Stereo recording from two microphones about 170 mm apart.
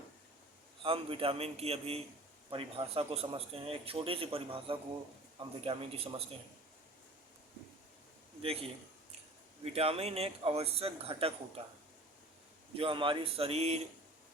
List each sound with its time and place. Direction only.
0.8 s speech: 35° right (ahead or behind)
8.4 s speech: 35° right (ahead or behind)
12.7 s speech: 30° right (ahead or behind)